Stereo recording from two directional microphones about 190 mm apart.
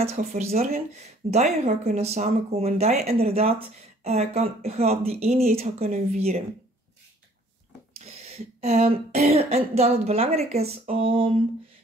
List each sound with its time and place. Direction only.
0.2 s speech: 40° right (ahead or behind)
8.0 s speech: 35° right (ahead or behind)